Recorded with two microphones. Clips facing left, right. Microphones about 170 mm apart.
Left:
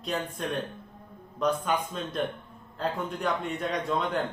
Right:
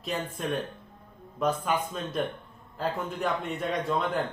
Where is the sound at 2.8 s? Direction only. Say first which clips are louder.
Even; centre (ahead or behind).